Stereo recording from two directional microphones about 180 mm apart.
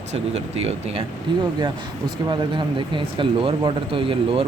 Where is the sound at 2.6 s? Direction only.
25° right (ahead or behind).